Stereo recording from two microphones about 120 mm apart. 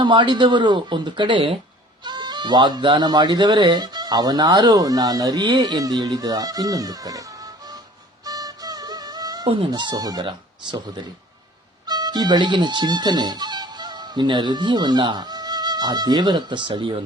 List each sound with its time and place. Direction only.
0.0 s speech: 40° right (ahead or behind)
8.2 s music: 30° right (ahead or behind)
9.5 s speech: 45° right (ahead or behind)
11.9 s speech: 35° right (ahead or behind)